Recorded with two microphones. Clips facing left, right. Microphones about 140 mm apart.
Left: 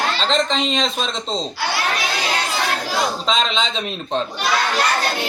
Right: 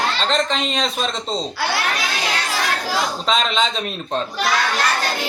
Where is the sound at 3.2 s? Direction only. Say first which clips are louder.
Right 1 dB; 5° right (ahead or behind).